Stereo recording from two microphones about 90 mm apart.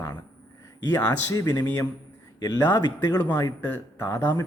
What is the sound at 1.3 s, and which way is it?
Speech, 45° left (ahead or behind).